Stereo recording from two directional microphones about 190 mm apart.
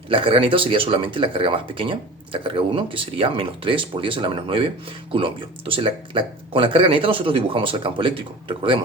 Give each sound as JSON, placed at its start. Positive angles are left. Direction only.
{"t": 0.1, "sound": "speech", "side_deg": -30}